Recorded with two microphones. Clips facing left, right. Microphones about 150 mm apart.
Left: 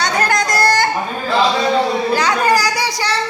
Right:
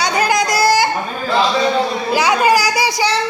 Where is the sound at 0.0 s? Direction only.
5° right (ahead or behind).